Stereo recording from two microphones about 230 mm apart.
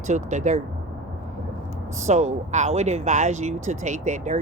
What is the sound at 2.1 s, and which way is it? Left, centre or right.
Speech, right.